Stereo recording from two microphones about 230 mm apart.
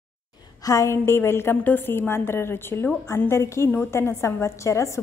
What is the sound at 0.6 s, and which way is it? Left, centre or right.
A woman's voice, centre.